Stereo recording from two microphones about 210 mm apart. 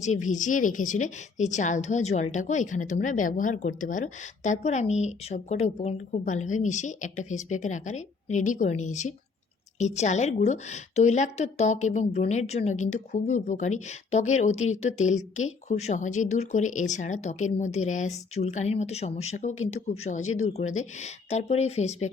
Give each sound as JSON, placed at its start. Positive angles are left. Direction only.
{"t": 0.0, "sound": "a woman's voice", "side_deg": 35}